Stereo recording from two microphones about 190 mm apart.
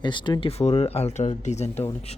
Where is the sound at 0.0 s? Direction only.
25° left (ahead or behind).